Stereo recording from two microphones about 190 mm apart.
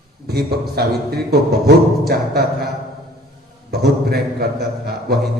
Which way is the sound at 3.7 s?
55° right (ahead or behind).